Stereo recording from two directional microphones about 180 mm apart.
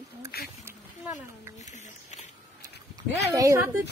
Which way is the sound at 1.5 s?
40° left (ahead or behind).